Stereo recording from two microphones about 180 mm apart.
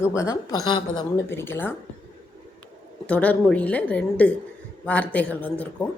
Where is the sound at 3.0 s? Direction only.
10° left (ahead or behind).